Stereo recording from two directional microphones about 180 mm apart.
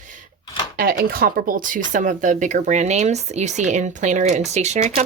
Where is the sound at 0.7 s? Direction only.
55° right (ahead or behind).